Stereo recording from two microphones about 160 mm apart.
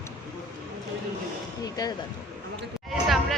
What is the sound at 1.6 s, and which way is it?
Speech, 25° left (ahead or behind).